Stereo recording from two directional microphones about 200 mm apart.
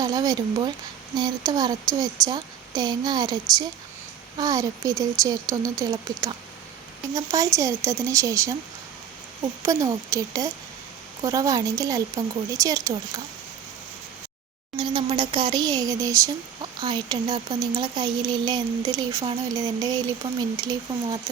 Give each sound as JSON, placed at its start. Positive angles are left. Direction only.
{"t": 0.0, "sound": "speech", "side_deg": -20}
{"t": 9.6, "sound": "speech", "side_deg": -15}
{"t": 14.8, "sound": "speech", "side_deg": -20}